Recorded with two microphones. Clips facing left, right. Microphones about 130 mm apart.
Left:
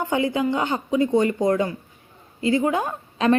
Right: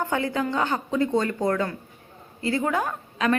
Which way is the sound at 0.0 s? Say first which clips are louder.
Left 3 dB; 15° left (ahead or behind).